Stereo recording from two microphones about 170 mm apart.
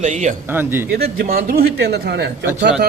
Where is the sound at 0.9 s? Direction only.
60° right (ahead or behind); by 2.2 s 75° right (ahead or behind).